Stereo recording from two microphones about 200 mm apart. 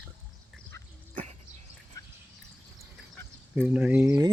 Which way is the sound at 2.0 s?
15° left (ahead or behind).